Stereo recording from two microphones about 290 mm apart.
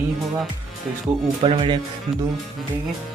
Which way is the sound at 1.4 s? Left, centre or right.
Centre.